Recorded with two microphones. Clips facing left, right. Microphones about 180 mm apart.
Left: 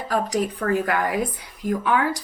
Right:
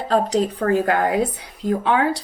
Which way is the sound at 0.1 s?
25° right (ahead or behind).